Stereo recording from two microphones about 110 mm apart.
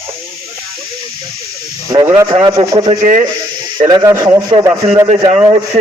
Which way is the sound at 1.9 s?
45° right (ahead or behind).